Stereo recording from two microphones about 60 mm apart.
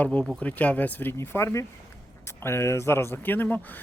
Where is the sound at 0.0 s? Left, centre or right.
Left.